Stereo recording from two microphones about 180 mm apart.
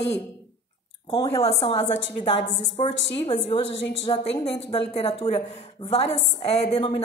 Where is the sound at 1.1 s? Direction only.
30° left (ahead or behind).